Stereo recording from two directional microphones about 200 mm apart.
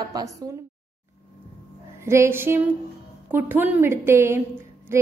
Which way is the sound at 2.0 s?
15° right (ahead or behind).